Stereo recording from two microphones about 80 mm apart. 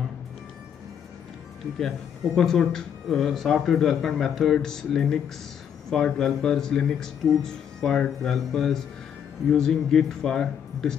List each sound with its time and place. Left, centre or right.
1.8 s speech: centre